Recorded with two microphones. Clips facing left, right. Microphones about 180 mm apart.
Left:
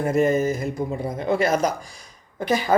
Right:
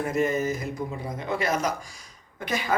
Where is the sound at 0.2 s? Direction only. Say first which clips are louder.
Left 5 dB; 45° left (ahead or behind).